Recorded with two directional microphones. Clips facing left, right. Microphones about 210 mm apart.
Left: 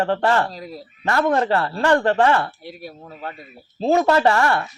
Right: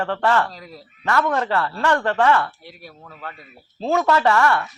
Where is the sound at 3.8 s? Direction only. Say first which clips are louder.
Left 2 dB; 30° left (ahead or behind).